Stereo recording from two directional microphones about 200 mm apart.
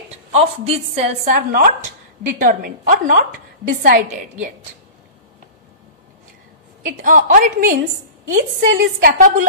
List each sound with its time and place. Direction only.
0.3 s a woman's voice: 30° right (ahead or behind)
7.0 s a woman's voice: 40° right (ahead or behind)